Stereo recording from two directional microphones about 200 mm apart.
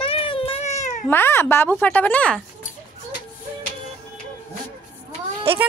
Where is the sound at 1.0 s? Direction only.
10° left (ahead or behind).